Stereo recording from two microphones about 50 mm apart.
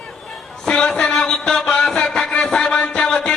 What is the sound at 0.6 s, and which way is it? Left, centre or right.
Music, centre.